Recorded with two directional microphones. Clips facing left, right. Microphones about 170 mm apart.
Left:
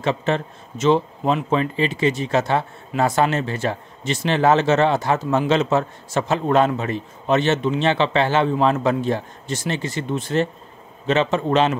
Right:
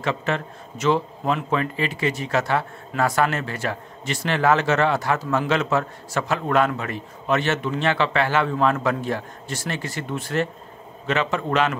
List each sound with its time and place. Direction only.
0.0 s speech: 25° left (ahead or behind)